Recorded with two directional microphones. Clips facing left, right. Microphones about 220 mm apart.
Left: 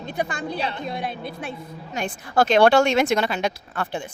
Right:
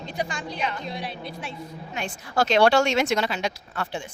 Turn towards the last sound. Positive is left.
turn(degrees=55)  # may be behind; listen again after turning